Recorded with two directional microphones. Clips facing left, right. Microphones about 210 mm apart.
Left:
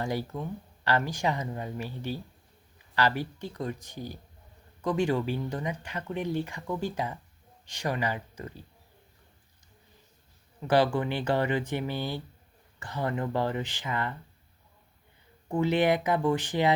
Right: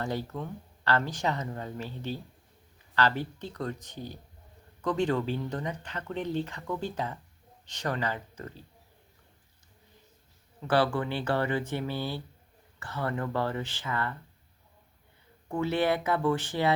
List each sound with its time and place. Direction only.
0.0 s speech: 10° left (ahead or behind)
10.7 s speech: 15° left (ahead or behind)
15.4 s speech: 15° left (ahead or behind)